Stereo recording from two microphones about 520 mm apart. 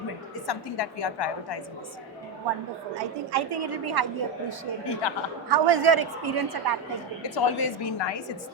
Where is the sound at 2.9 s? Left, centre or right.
Right.